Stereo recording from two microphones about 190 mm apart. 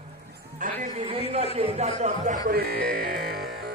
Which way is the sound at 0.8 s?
30° right (ahead or behind).